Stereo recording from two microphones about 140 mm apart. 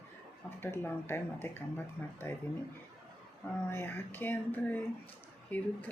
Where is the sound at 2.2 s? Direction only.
20° left (ahead or behind).